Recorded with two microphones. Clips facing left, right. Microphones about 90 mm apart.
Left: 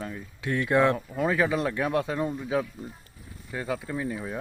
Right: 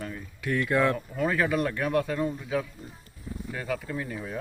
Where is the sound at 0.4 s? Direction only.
25° left (ahead or behind).